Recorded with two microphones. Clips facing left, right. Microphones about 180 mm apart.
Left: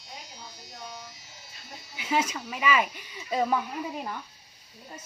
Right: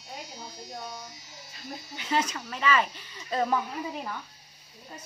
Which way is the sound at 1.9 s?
10° left (ahead or behind).